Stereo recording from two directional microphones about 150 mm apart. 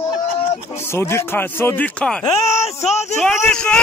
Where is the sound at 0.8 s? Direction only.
15° left (ahead or behind).